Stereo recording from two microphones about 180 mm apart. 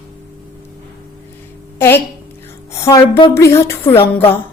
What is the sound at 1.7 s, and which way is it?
A woman's voice, 15° left (ahead or behind).